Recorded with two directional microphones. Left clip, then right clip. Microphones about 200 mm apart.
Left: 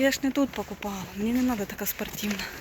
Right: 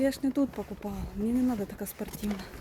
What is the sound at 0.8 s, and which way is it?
Speech, 10° left (ahead or behind).